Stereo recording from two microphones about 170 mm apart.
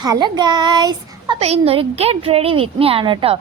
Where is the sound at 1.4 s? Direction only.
35° right (ahead or behind).